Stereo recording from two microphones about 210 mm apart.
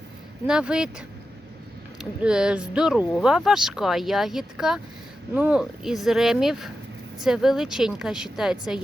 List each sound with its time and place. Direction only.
0.4 s speech: 5° right (ahead or behind)